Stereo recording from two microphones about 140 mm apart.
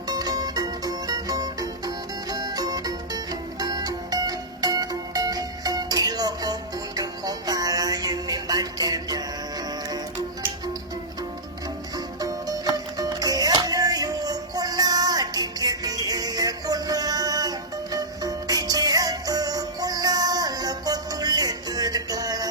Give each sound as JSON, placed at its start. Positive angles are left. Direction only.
{"t": 0.1, "sound": "music", "side_deg": -30}
{"t": 12.2, "sound": "music", "side_deg": -25}